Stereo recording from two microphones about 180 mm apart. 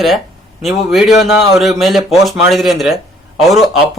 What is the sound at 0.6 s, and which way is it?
Speech, centre (ahead or behind).